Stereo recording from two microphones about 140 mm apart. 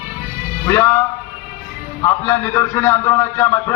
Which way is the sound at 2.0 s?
20° left (ahead or behind).